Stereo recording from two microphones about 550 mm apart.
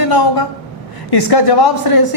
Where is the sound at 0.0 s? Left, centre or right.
Left.